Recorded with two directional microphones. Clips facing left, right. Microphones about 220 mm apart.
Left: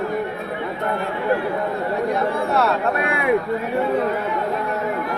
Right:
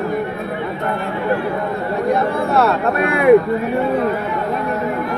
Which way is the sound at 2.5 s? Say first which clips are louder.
Right 5 dB; 50° right (ahead or behind).